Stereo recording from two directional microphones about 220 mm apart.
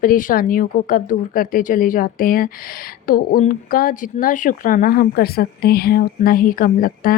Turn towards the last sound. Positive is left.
turn(degrees=40)  # may be behind; listen again after turning